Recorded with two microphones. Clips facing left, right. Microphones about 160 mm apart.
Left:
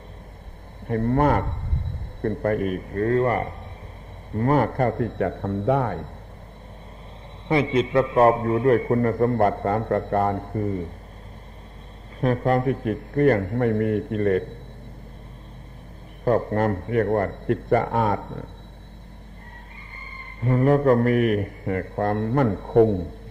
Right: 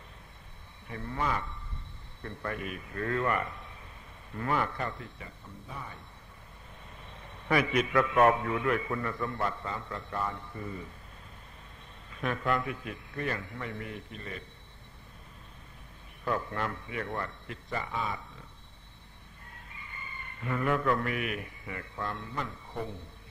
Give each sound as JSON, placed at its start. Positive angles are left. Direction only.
{"t": 0.8, "sound": "a man's voice", "side_deg": 55}
{"t": 7.4, "sound": "a man's voice", "side_deg": 25}
{"t": 12.2, "sound": "a man's voice", "side_deg": 40}
{"t": 16.3, "sound": "a man's voice", "side_deg": 45}
{"t": 20.3, "sound": "a man's voice", "side_deg": 35}